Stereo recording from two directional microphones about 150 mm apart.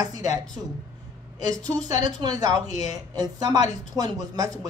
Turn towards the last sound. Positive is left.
turn(degrees=-25)  # may be behind; listen again after turning